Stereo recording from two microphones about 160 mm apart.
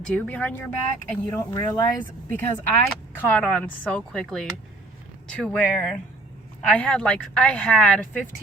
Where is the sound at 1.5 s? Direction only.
25° left (ahead or behind).